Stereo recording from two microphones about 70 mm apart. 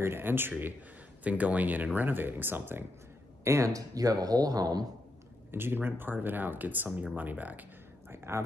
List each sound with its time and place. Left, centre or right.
0.0 s speech: right
3.4 s speech: right
5.5 s speech: right
8.1 s a sound: right